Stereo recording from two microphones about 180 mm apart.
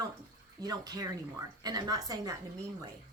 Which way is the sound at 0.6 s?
20° right (ahead or behind).